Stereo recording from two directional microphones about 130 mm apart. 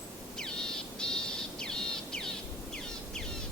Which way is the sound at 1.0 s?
5° left (ahead or behind).